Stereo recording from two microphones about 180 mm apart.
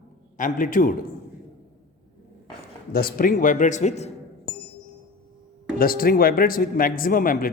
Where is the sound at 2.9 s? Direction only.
55° left (ahead or behind); by 4.1 s 40° left (ahead or behind).